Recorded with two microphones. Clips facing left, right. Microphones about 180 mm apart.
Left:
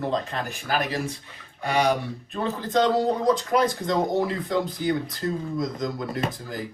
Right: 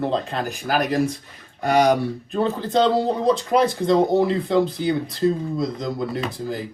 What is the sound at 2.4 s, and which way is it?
Speech, 30° right (ahead or behind).